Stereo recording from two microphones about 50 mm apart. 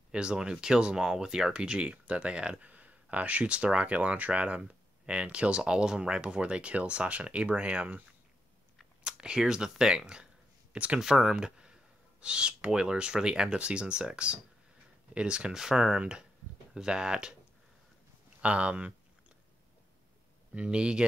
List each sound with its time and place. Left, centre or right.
0.1 s speech: centre
2.6 s speech: right
9.0 s a sound: centre
9.4 s speech: centre
11.0 s speech: centre
18.4 s speech: right
20.5 s speech: centre